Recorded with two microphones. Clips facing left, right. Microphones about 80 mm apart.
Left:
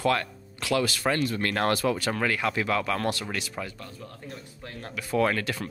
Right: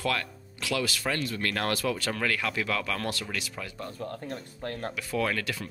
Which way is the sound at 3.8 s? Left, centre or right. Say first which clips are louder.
Right 6 dB; right.